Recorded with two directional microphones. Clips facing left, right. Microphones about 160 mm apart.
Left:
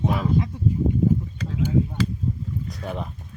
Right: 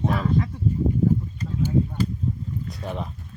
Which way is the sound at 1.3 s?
90° left.